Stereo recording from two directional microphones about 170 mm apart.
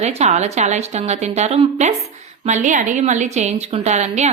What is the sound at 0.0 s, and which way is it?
A woman's voice, 40° right (ahead or behind).